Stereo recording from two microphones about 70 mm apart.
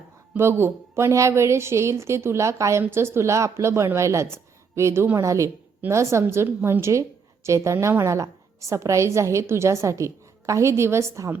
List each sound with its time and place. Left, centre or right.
0.3 s a woman's voice: right